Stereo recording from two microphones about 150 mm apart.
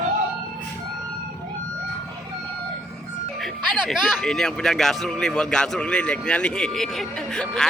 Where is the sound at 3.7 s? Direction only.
Centre (ahead or behind).